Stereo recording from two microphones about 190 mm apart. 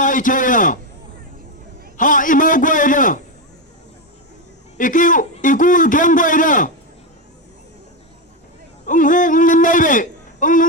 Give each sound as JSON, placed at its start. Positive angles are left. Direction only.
{"t": 0.0, "sound": "a man's voice", "side_deg": 45}
{"t": 2.0, "sound": "a man's voice", "side_deg": 45}
{"t": 4.8, "sound": "a man's voice", "side_deg": 45}
{"t": 8.9, "sound": "a man's voice", "side_deg": 45}